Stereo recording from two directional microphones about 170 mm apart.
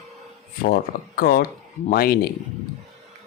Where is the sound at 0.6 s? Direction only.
60° left (ahead or behind).